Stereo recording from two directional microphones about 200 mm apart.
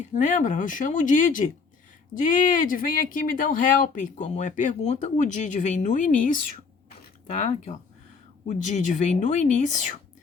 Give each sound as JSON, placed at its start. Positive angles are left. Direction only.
{"t": 0.0, "sound": "speech", "side_deg": 40}